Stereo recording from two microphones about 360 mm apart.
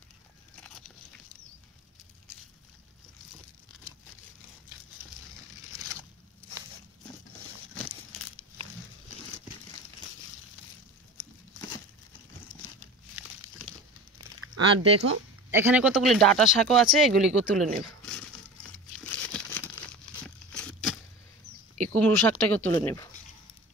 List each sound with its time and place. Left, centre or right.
0.7 s biting: centre
14.1 s a sound: right
15.5 s speech: centre
18.6 s crumpling: centre
20.2 s a sound: centre
21.9 s speech: centre